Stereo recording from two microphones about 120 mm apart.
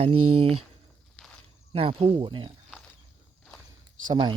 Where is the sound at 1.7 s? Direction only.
50° right (ahead or behind).